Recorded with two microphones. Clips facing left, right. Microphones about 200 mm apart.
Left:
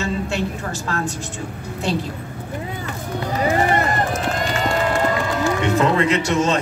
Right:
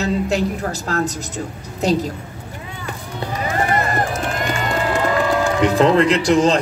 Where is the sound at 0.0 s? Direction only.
40° right (ahead or behind).